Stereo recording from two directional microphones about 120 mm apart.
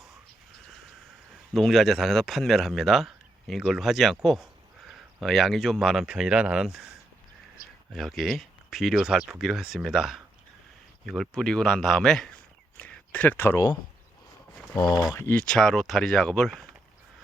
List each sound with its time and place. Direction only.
1.5 s speech: centre (ahead or behind)
7.9 s speech: centre (ahead or behind)
12.7 s a sound: 10° left (ahead or behind)
14.8 s speech: 35° left (ahead or behind)
15.3 s speech: 10° left (ahead or behind)